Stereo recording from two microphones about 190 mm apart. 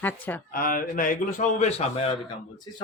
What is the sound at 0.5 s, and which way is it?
A man's voice, 50° left (ahead or behind).